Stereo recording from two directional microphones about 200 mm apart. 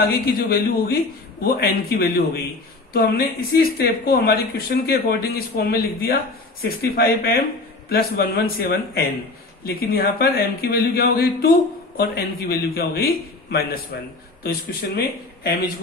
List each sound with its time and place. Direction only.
0.0 s a man's voice: 50° left (ahead or behind)